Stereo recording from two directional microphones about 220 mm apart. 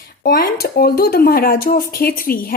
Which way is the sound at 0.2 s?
45° left (ahead or behind).